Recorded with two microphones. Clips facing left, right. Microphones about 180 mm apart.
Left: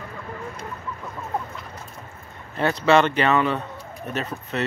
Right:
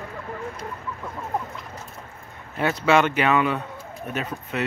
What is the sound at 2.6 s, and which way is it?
Speech, 5° right (ahead or behind).